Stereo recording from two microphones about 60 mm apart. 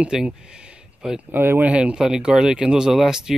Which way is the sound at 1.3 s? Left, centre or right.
Right.